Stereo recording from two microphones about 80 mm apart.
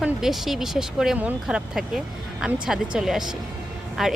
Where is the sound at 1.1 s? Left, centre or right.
Centre.